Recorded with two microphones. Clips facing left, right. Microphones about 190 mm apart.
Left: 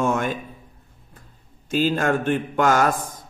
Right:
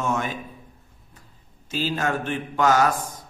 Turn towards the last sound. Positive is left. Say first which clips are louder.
# left 1 dB
turn(degrees=50)  # may be behind; listen again after turning